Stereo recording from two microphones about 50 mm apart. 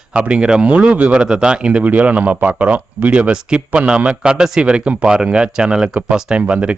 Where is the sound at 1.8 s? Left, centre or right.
Right.